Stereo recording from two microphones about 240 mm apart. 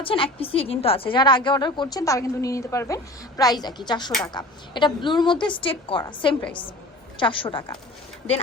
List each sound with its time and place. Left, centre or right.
0.0 s a woman's voice: left